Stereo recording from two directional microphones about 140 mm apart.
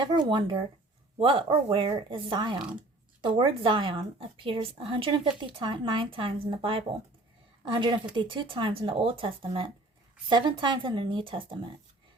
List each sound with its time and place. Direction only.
0.0 s speech: 30° right (ahead or behind)